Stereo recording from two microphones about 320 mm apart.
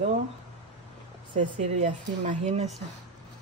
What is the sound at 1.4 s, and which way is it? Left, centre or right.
Speech, right.